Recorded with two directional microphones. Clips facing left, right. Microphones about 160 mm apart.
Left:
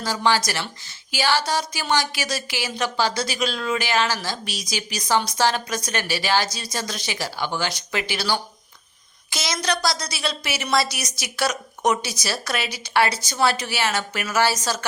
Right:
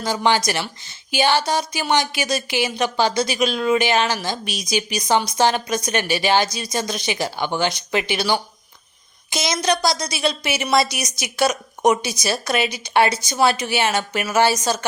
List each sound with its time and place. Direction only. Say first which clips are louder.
0.0 s speech: right 3 dB; 20° right (ahead or behind)